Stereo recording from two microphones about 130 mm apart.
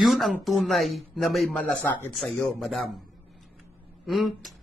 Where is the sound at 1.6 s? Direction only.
15° left (ahead or behind).